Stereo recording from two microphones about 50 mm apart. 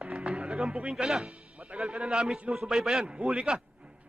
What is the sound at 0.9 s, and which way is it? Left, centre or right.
Speech, centre.